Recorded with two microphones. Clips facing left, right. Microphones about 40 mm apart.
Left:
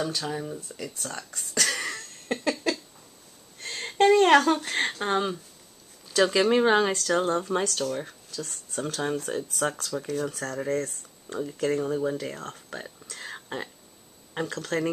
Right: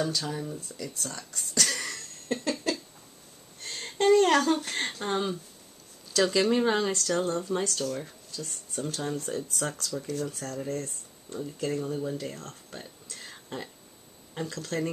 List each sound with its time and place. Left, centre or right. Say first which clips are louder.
0.0 s speech: left 1 dB; centre
0.7 s speech: left 1 dB; left
2.3 s speech: left 1 dB; left
3.6 s a sound: left 3 dB; left
4.7 s speech: left 4 dB; left
6.5 s speech: left 4 dB; left
8.3 s speech: left 3 dB; left
9.0 s speech: left 5 dB; left
10.2 s speech: left 4 dB; left
13.1 s whispering: left 4 dB; left
14.3 s speech: left 4 dB; left